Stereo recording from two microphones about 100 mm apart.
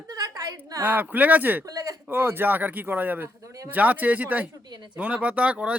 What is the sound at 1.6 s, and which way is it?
Speech, 35° right (ahead or behind).